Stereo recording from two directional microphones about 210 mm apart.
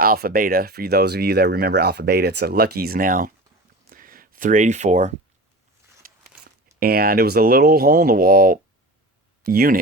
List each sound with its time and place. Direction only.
0.0 s speech: 45° right (ahead or behind)
3.8 s a sound: 40° right (ahead or behind)
6.7 s speech: 45° right (ahead or behind)